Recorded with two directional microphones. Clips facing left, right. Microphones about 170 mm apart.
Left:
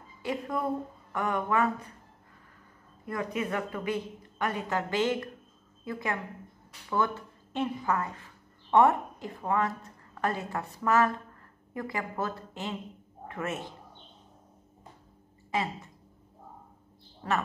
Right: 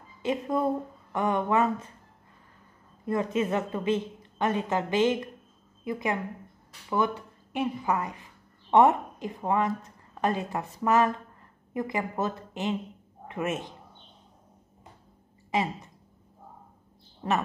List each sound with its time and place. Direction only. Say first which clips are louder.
0.2 s a woman's voice: right 5 dB; 20° right (ahead or behind)
3.1 s a woman's voice: right 5 dB; 25° right (ahead or behind)
15.5 s speech: right 3 dB; 15° right (ahead or behind)
17.2 s a woman's voice: right 3 dB; 20° right (ahead or behind)